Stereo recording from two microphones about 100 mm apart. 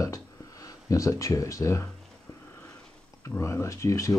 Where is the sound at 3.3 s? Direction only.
30° left (ahead or behind).